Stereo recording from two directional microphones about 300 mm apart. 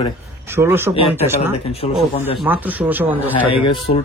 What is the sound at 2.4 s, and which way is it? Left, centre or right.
Speech, centre.